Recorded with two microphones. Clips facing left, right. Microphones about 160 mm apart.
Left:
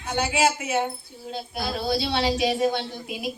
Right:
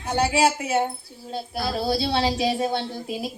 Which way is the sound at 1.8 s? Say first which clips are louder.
Right 2 dB; 35° right (ahead or behind).